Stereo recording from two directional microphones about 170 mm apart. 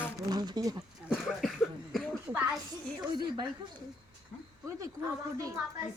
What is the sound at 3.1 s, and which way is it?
Speech, 25° right (ahead or behind).